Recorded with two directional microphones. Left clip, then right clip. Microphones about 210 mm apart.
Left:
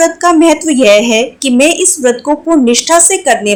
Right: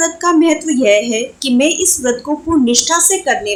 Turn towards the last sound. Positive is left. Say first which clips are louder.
# left 5 dB
turn(degrees=20)  # may be behind; listen again after turning